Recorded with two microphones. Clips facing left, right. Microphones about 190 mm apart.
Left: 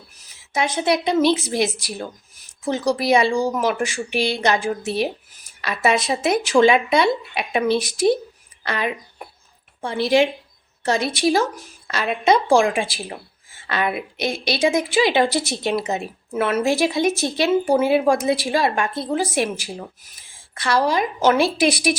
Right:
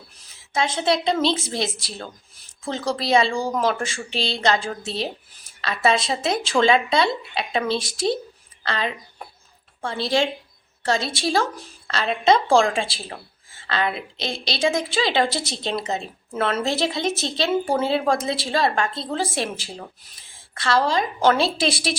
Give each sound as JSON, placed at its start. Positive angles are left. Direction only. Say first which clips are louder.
{"t": 0.5, "sound": "a woman's voice", "louder": "left 1 dB", "side_deg": 15}